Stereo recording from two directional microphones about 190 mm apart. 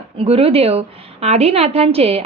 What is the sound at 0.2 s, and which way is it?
A woman's voice, 30° right (ahead or behind).